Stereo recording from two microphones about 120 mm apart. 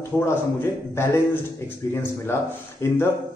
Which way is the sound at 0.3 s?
20° left (ahead or behind).